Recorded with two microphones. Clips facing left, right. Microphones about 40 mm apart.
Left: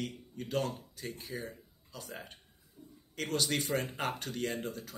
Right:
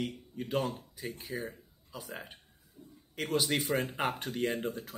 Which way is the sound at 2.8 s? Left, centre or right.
Right.